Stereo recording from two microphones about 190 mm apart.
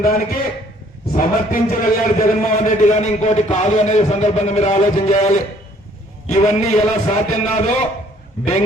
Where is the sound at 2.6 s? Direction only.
40° left (ahead or behind).